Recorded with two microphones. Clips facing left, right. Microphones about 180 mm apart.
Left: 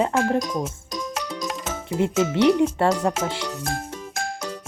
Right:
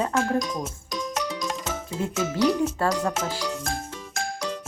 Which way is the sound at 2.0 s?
25° left (ahead or behind).